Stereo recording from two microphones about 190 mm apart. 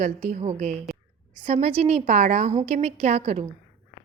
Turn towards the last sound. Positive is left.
turn(degrees=-35)  # may be behind; listen again after turning